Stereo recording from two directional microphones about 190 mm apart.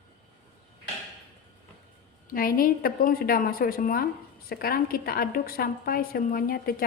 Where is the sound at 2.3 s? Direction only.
50° left (ahead or behind).